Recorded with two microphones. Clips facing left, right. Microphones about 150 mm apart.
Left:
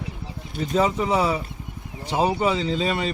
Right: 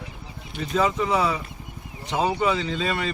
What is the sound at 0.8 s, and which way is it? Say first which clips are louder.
Speech: left 1 dB; 25° left (ahead or behind).